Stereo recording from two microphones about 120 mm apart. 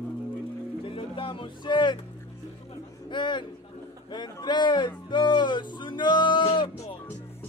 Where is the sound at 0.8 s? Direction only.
45° left (ahead or behind).